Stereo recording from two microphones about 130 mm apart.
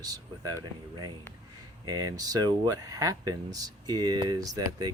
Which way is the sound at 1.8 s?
30° right (ahead or behind).